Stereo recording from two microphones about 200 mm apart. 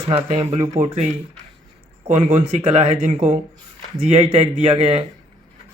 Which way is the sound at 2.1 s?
35° right (ahead or behind).